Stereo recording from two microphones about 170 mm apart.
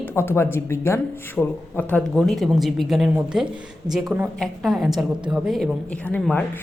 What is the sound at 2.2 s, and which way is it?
A woman's voice, centre (ahead or behind).